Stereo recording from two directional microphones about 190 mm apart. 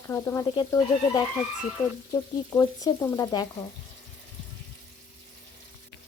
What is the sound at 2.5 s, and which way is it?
Frying, 15° left (ahead or behind).